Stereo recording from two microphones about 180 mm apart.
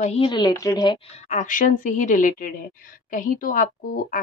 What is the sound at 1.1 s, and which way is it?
Speech, 40° left (ahead or behind).